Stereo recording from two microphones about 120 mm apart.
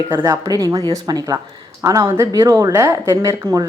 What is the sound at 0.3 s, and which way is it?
A woman's voice, 30° right (ahead or behind).